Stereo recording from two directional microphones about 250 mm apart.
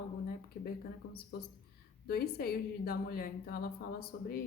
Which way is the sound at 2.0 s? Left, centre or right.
Left.